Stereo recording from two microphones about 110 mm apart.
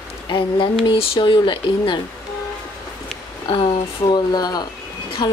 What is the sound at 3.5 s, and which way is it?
Speech, 60° left (ahead or behind).